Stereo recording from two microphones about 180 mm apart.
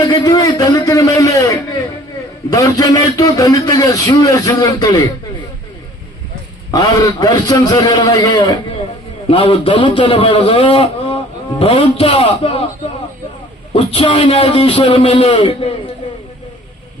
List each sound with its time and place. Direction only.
0.1 s a sound: 25° left (ahead or behind)
2.5 s a man's voice: 20° left (ahead or behind)
6.7 s a man's voice: 20° left (ahead or behind)
13.7 s a man's voice: 30° left (ahead or behind)